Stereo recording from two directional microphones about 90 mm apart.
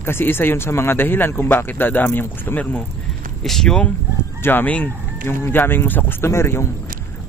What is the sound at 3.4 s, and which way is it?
Speech, 5° left (ahead or behind).